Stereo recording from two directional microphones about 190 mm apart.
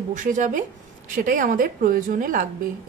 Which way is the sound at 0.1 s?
45° right (ahead or behind).